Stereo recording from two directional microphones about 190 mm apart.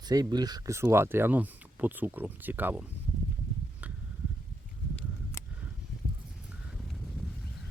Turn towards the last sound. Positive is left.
turn(degrees=0)  # may be behind; listen again after turning